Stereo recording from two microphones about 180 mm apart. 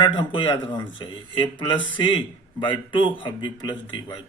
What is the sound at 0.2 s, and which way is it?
Speech, 25° left (ahead or behind).